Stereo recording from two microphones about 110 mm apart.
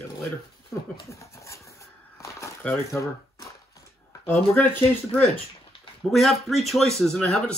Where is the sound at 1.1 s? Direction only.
30° left (ahead or behind).